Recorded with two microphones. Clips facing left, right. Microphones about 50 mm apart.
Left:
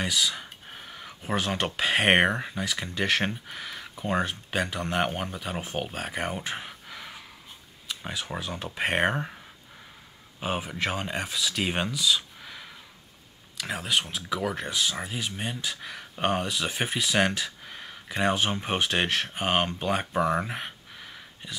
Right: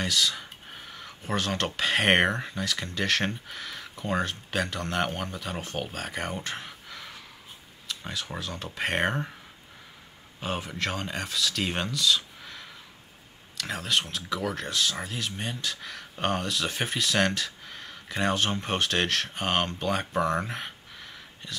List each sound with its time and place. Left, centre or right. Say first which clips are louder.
0.0 s speech: even; centre
10.4 s speech: left 2 dB; centre